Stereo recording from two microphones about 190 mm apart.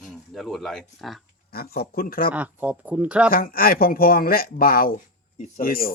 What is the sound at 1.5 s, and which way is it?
Speech, 55° left (ahead or behind).